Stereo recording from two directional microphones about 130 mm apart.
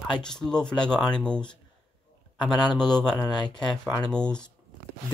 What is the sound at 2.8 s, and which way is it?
Speech, 5° left (ahead or behind).